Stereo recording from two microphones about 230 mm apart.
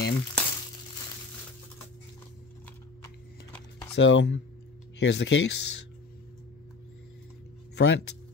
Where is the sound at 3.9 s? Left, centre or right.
Left.